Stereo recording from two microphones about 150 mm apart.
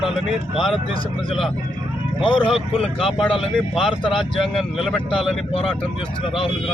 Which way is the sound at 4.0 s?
35° left (ahead or behind).